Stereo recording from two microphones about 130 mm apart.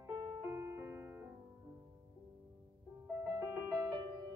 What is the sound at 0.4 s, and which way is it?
Music, 20° right (ahead or behind).